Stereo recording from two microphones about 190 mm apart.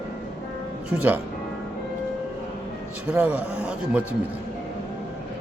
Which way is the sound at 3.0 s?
5° right (ahead or behind).